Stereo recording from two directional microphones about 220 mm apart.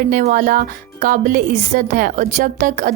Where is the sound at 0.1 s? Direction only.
40° right (ahead or behind).